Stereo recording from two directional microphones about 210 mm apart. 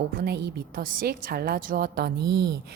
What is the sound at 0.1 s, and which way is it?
A woman's voice, 45° right (ahead or behind).